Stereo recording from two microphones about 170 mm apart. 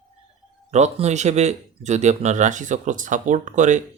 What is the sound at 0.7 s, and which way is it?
Speech, 40° right (ahead or behind).